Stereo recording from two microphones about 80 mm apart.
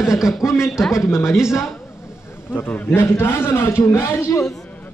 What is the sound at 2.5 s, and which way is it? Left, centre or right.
Speech, left.